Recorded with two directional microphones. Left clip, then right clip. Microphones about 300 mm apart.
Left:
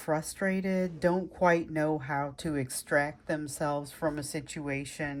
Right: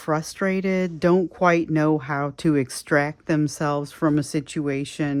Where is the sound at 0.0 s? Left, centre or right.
Centre.